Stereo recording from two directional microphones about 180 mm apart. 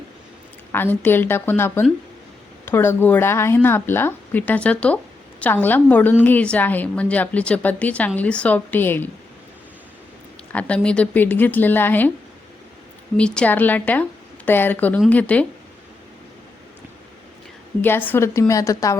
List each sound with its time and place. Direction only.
0.7 s a woman's voice: 10° left (ahead or behind)
10.5 s a woman's voice: 5° left (ahead or behind)
13.1 s a woman's voice: 5° left (ahead or behind)
17.8 s a woman's voice: 10° left (ahead or behind)